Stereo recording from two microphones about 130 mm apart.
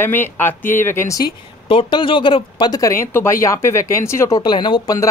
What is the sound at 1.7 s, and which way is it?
Speech, 40° left (ahead or behind).